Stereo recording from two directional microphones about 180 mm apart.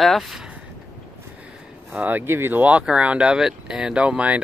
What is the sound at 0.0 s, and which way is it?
Speech, centre (ahead or behind).